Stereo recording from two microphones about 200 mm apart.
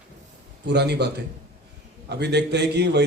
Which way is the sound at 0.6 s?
55° right (ahead or behind).